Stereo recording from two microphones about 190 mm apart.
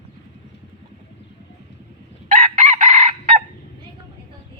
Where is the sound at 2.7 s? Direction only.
35° right (ahead or behind).